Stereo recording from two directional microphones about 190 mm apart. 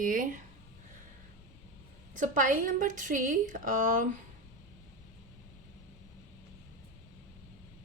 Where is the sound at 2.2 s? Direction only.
45° right (ahead or behind).